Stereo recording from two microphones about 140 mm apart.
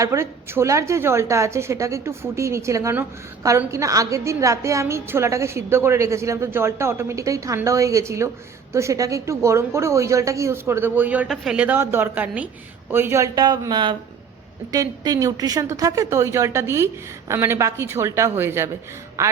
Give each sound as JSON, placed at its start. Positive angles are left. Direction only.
{"t": 0.0, "sound": "a woman's voice", "side_deg": -20}